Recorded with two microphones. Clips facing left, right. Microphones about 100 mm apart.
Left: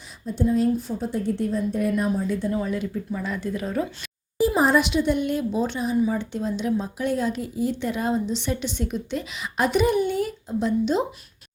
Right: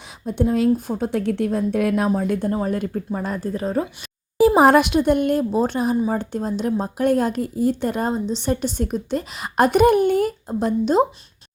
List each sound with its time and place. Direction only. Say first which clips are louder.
0.3 s a woman's voice: right 2 dB; 65° right (ahead or behind)
0.8 s a woman's voice: right 4 dB; 60° right (ahead or behind); by 2.0 s 75° right (ahead or behind)
2.0 s speech: right 4 dB; 60° right (ahead or behind)
2.5 s a woman's voice: right 3 dB; 45° right (ahead or behind)
4.4 s a woman's voice: right 6 dB; 70° right (ahead or behind); by 8.1 s 45° right (ahead or behind)
8.1 s a woman's voice: right 3 dB; 35° right (ahead or behind)